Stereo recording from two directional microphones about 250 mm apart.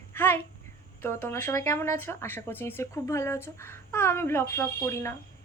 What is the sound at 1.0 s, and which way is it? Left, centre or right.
A woman's voice, centre.